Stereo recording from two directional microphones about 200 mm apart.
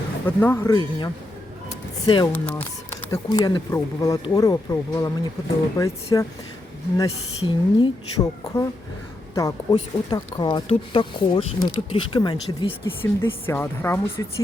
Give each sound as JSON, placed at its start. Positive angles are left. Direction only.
{"t": 0.3, "sound": "speech", "side_deg": 10}
{"t": 0.8, "sound": "speech", "side_deg": 25}
{"t": 2.3, "sound": "speech", "side_deg": 10}